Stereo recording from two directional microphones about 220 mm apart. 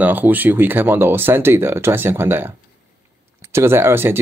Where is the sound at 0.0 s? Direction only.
10° right (ahead or behind).